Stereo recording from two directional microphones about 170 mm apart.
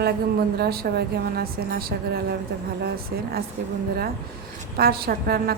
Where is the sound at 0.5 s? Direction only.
65° right (ahead or behind).